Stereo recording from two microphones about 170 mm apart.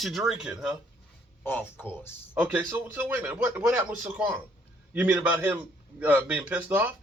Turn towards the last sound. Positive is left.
turn(degrees=-10)  # may be behind; listen again after turning